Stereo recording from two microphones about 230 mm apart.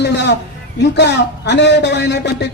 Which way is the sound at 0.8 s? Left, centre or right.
Left.